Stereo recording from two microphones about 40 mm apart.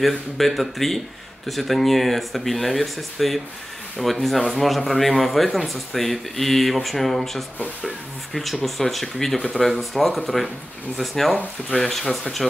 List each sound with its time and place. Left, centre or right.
0.0 s speech: centre